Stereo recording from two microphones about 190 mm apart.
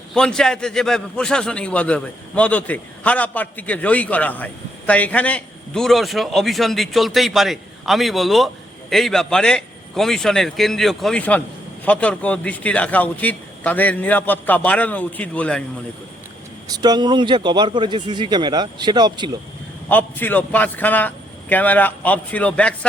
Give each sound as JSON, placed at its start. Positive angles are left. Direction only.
{"t": 0.1, "sound": "a man's voice", "side_deg": 5}
{"t": 16.7, "sound": "speech", "side_deg": -20}
{"t": 19.9, "sound": "a man's voice", "side_deg": 10}